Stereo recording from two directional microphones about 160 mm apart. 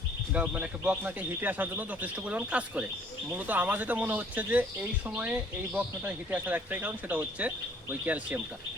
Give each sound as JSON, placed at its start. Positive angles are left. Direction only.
{"t": 0.3, "sound": "speech", "side_deg": -10}